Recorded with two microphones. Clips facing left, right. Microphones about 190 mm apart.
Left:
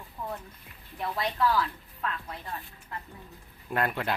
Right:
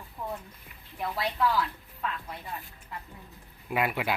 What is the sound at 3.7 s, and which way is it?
Speech, 5° right (ahead or behind).